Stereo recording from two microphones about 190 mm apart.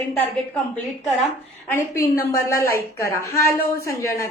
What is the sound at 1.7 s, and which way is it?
A woman's voice, 10° left (ahead or behind).